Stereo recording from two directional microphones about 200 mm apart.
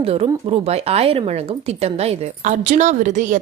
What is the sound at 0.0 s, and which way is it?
Speech, 30° right (ahead or behind).